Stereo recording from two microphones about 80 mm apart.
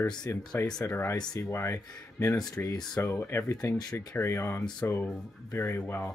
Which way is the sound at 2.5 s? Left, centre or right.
Left.